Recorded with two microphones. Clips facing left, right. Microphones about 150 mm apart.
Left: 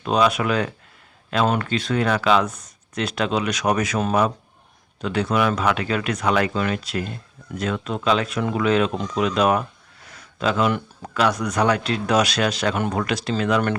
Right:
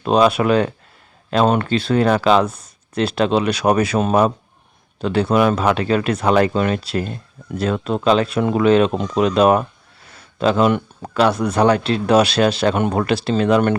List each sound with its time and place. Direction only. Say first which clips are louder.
0.0 s speech: right 5 dB; 30° right (ahead or behind)
10.2 s a sound: right 5 dB; 30° right (ahead or behind)
10.7 s speech: right 5 dB; 30° right (ahead or behind)